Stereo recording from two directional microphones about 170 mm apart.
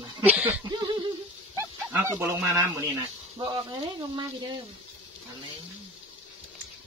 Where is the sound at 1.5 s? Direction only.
10° right (ahead or behind).